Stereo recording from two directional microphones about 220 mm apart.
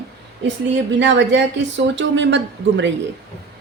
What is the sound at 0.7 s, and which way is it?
A woman's voice, 55° right (ahead or behind).